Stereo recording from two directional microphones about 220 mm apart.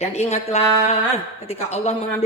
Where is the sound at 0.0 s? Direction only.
30° left (ahead or behind).